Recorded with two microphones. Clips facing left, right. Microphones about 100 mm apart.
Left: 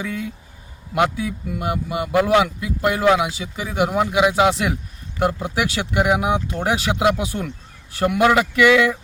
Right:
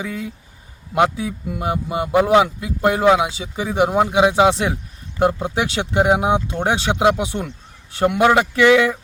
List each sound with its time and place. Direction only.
0.0 s a man's voice: 20° right (ahead or behind)